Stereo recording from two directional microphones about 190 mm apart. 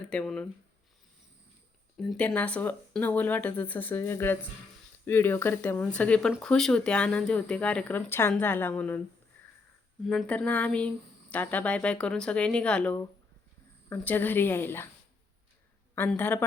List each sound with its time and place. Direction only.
0.1 s speech: 5° left (ahead or behind)
2.0 s speech: 5° left (ahead or behind)
10.0 s speech: centre (ahead or behind)
16.0 s speech: 10° left (ahead or behind)